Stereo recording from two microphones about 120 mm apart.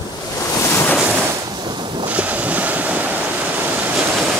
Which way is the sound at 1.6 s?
40° right (ahead or behind).